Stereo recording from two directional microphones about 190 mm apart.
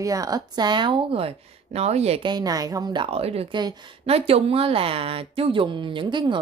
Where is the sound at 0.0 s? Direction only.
20° right (ahead or behind).